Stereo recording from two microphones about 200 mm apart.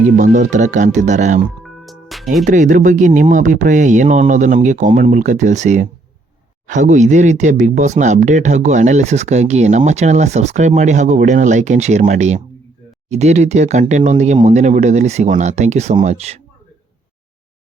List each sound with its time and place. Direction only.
0.2 s speech: 40° right (ahead or behind)
1.6 s music: centre (ahead or behind)
2.4 s speech: 40° right (ahead or behind)